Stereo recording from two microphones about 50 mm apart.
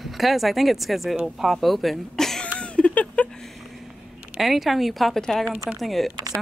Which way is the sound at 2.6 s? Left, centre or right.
Left.